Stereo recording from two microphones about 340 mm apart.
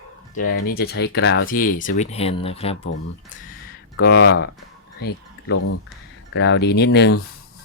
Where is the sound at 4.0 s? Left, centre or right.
Left.